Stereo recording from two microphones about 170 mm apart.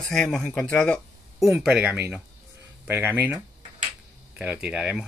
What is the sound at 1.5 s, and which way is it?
Speech, 5° right (ahead or behind).